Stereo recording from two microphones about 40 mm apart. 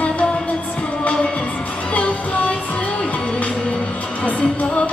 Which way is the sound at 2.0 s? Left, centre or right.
Left.